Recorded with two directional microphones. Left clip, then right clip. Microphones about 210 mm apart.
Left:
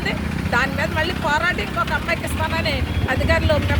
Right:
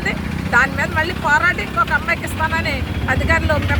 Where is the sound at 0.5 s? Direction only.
Centre (ahead or behind).